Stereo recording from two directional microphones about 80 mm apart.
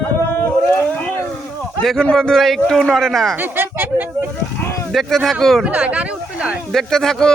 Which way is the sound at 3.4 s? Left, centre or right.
Right.